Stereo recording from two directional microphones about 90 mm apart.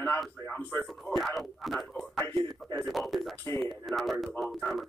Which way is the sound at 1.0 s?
Centre (ahead or behind).